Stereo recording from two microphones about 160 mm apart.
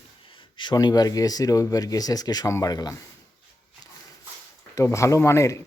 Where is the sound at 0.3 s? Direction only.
30° left (ahead or behind).